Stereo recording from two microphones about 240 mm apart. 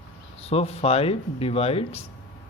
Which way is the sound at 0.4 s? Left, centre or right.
Left.